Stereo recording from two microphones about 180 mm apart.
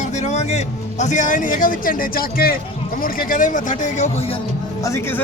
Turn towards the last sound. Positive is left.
turn(degrees=15)  # may be behind; listen again after turning